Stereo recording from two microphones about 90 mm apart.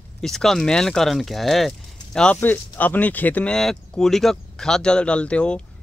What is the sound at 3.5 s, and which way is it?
Speech, 5° left (ahead or behind).